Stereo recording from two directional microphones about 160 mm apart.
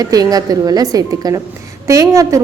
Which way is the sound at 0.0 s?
25° right (ahead or behind).